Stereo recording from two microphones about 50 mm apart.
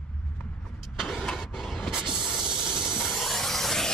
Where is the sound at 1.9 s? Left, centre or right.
Centre.